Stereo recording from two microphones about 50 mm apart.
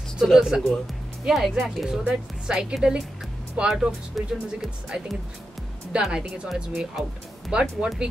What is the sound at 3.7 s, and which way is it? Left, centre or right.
Speech, centre.